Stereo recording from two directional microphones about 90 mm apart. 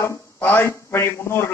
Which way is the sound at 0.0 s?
25° left (ahead or behind).